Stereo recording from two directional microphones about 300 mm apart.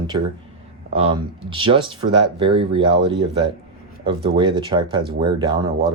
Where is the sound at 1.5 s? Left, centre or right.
Centre.